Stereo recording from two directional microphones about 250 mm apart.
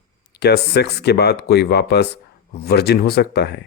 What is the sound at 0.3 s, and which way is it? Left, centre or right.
Speech, left.